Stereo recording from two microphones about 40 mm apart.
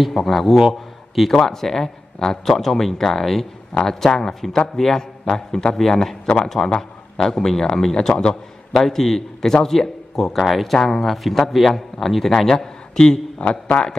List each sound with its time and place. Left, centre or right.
0.0 s a man's voice: centre
8.7 s a man's voice: centre; by 13.5 s left